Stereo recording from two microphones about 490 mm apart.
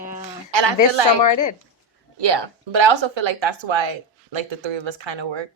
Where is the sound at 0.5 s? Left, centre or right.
Right.